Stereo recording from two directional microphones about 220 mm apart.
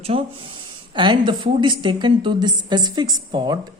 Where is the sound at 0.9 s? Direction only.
20° right (ahead or behind).